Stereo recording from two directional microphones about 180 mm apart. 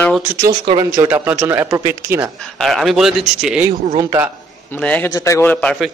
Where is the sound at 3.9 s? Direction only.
20° right (ahead or behind).